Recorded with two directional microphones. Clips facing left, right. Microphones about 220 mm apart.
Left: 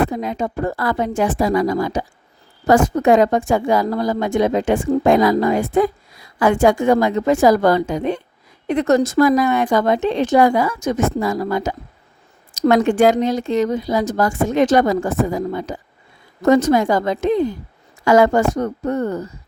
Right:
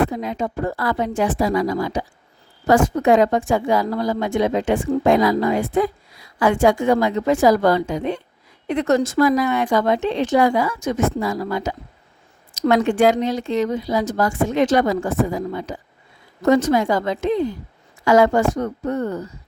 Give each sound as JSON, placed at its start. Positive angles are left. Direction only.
{"t": 0.1, "sound": "a woman's voice", "side_deg": 45}